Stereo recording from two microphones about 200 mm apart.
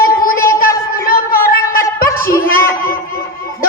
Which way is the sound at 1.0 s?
45° left (ahead or behind).